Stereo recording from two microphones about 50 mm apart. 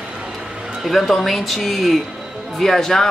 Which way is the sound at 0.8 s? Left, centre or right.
Centre.